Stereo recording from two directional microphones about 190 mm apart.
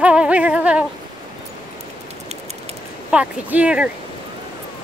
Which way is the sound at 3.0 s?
5° right (ahead or behind).